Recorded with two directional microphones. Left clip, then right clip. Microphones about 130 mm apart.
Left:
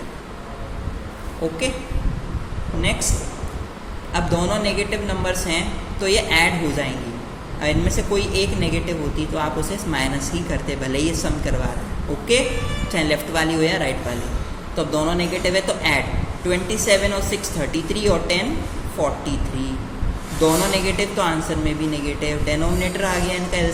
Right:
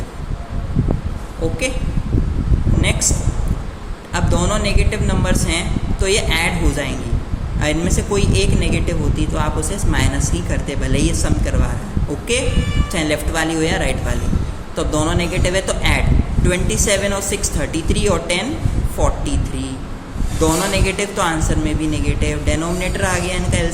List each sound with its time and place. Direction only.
4.1 s speech: 20° right (ahead or behind)
12.9 s speech: 15° right (ahead or behind)
20.4 s speech: 15° right (ahead or behind)